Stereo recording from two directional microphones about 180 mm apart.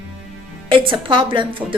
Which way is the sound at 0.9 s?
30° right (ahead or behind).